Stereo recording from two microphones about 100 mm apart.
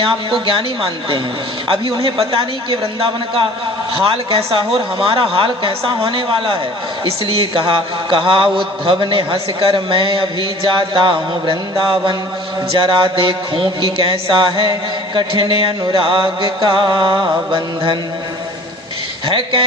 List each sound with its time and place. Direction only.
0.5 s a man's voice: 65° right (ahead or behind)
19.3 s a man's voice: 60° right (ahead or behind)